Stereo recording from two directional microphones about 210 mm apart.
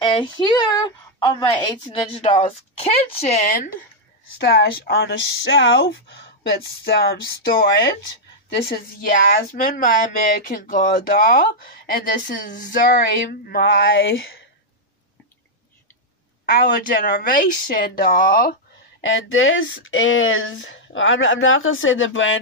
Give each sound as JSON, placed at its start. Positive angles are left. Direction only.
{"t": 0.0, "sound": "speech", "side_deg": 20}
{"t": 4.8, "sound": "speech", "side_deg": 55}
{"t": 9.2, "sound": "speech", "side_deg": 45}
{"t": 16.4, "sound": "a woman's voice", "side_deg": 45}
{"t": 19.0, "sound": "speech", "side_deg": 70}